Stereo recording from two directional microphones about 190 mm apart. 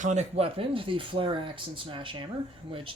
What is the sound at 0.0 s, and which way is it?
Speech, 40° right (ahead or behind).